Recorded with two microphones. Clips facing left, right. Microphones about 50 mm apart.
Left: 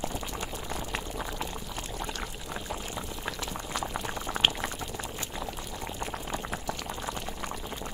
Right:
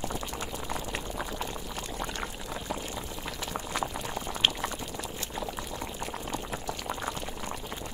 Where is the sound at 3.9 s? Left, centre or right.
Centre.